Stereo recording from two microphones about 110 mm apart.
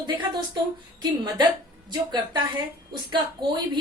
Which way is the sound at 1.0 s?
40° right (ahead or behind).